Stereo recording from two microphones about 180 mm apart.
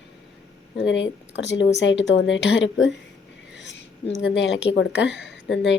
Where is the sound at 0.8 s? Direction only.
90° left.